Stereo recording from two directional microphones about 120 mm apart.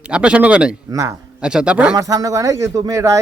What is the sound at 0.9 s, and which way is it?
Speech, 25° right (ahead or behind).